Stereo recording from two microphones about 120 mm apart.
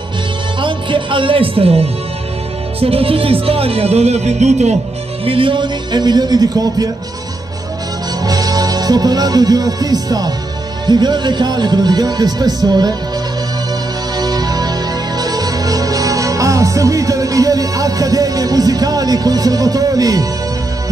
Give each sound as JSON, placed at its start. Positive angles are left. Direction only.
{"t": 0.6, "sound": "music", "side_deg": -45}
{"t": 2.8, "sound": "speech", "side_deg": -55}
{"t": 5.2, "sound": "speech", "side_deg": -50}
{"t": 8.2, "sound": "speech", "side_deg": -30}
{"t": 14.1, "sound": "music", "side_deg": -35}